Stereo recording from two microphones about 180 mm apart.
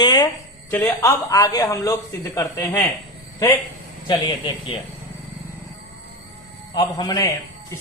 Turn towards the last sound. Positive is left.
turn(degrees=20)  # may be behind; listen again after turning